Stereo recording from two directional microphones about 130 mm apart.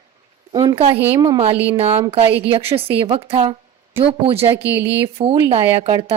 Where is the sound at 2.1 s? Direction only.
50° right (ahead or behind).